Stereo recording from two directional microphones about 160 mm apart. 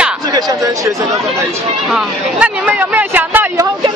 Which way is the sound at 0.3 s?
25° right (ahead or behind).